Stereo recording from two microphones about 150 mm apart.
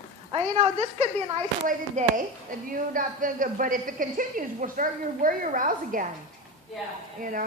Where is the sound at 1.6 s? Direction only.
60° right (ahead or behind).